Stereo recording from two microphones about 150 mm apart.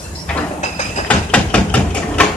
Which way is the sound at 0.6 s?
50° left (ahead or behind).